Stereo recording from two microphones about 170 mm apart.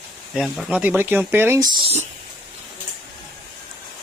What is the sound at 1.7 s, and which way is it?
Speech, 25° right (ahead or behind).